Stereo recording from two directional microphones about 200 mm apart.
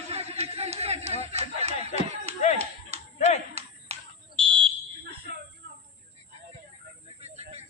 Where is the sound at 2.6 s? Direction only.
35° right (ahead or behind).